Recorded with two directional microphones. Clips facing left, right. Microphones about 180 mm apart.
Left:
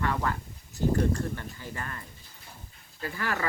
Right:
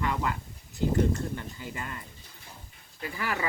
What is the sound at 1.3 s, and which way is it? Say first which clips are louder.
Speech: right 1 dB; 15° right (ahead or behind).